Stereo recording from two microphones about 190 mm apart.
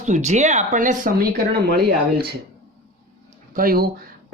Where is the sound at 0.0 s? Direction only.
40° right (ahead or behind); by 2.3 s 55° right (ahead or behind).